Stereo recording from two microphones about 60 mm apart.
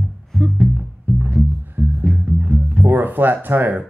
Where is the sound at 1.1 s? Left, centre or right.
Right.